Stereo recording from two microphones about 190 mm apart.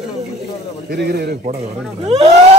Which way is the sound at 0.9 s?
55° right (ahead or behind).